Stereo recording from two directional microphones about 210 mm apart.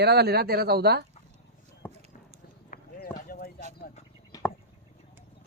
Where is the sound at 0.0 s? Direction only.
50° right (ahead or behind).